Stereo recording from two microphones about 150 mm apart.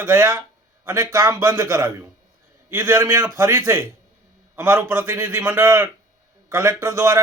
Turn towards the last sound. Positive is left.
turn(degrees=-20)  # may be behind; listen again after turning